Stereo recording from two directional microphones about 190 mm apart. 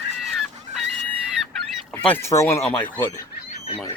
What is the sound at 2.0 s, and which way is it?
Speech, 10° left (ahead or behind).